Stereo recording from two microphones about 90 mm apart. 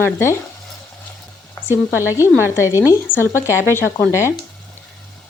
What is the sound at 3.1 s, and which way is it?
Speech, 10° right (ahead or behind).